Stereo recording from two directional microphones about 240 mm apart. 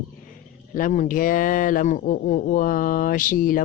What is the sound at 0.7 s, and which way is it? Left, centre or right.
Speech, left.